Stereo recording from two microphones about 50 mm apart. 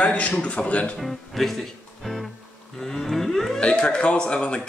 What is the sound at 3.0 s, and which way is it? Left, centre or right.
Whale vocalization, centre.